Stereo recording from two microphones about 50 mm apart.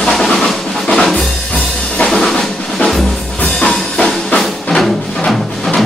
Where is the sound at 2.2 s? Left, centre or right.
Centre.